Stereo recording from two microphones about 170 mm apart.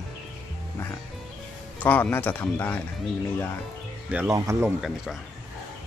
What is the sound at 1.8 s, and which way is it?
Speech, 10° left (ahead or behind).